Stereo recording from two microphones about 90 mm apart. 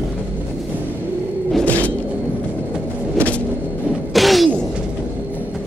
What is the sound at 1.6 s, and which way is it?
Music, 15° left (ahead or behind).